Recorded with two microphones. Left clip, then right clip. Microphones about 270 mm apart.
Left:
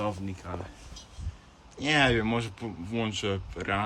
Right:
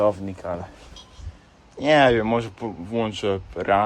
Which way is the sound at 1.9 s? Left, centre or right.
Centre.